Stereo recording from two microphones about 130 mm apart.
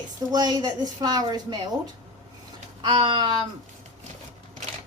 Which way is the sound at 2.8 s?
40° right (ahead or behind).